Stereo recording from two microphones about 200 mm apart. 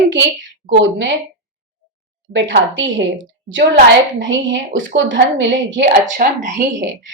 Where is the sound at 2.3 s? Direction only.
70° right (ahead or behind).